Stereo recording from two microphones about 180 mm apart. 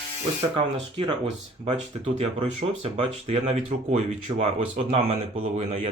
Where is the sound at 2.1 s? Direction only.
35° right (ahead or behind).